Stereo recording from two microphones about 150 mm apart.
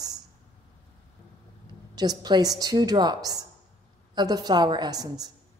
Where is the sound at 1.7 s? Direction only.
30° right (ahead or behind).